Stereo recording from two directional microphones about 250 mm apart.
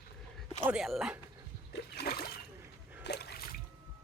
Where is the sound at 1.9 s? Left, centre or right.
Left.